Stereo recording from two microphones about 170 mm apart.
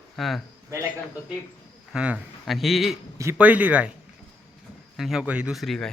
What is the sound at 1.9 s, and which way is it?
A man's voice, 5° right (ahead or behind).